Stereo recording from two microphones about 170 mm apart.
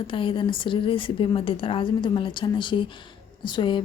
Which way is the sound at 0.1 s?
30° left (ahead or behind).